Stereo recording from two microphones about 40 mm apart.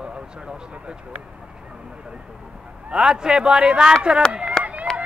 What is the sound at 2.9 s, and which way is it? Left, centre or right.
Speech, centre.